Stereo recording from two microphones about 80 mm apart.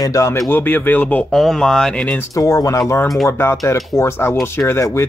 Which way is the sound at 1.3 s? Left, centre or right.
Centre.